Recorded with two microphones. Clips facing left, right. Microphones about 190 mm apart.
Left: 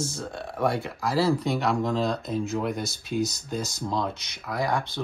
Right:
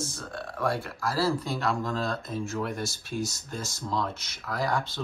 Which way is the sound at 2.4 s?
15° left (ahead or behind).